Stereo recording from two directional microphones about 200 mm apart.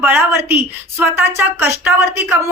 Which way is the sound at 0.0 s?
10° right (ahead or behind).